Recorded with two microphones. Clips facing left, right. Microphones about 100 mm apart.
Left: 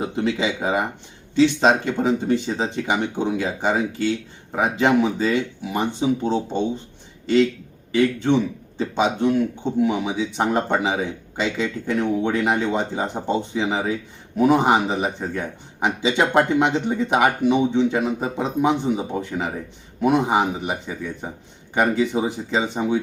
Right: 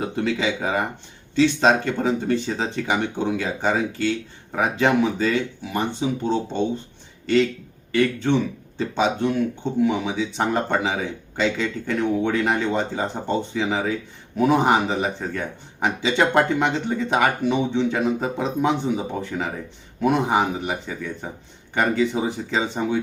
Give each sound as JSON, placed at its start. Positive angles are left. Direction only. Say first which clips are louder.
{"t": 0.0, "sound": "a man's voice", "louder": "left 1 dB", "side_deg": 20}
{"t": 7.9, "sound": "a man's voice", "louder": "left 2 dB", "side_deg": 5}